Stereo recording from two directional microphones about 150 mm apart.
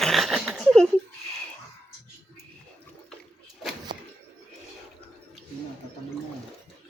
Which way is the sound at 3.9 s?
30° right (ahead or behind).